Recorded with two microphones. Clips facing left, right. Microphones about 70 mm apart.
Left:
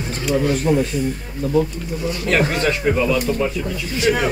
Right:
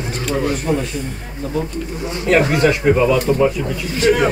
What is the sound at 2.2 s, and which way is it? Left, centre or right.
Speech, centre.